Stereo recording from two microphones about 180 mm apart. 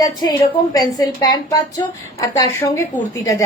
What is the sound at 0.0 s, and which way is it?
A woman's voice, 20° left (ahead or behind).